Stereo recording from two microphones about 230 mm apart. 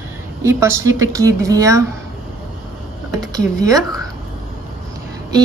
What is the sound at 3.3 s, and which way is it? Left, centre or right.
Speech, centre.